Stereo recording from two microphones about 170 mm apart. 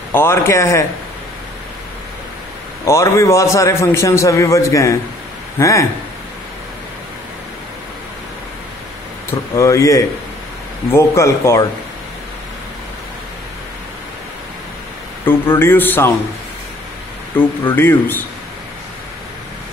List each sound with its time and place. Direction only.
0.1 s a man's voice: 15° left (ahead or behind)
2.8 s a man's voice: 15° left (ahead or behind)
9.3 s a man's voice: 15° left (ahead or behind)
15.2 s a man's voice: 15° left (ahead or behind)
17.4 s a man's voice: 10° left (ahead or behind)